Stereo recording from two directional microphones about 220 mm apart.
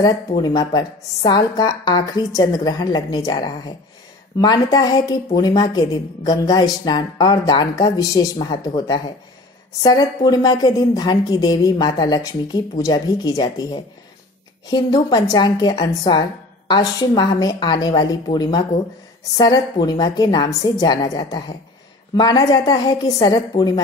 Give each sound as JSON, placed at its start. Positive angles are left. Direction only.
{"t": 0.4, "sound": "a woman's voice", "side_deg": 20}